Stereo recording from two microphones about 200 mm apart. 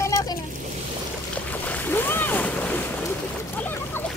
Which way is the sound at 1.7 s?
10° left (ahead or behind).